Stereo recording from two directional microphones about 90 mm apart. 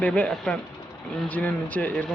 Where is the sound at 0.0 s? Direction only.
15° left (ahead or behind).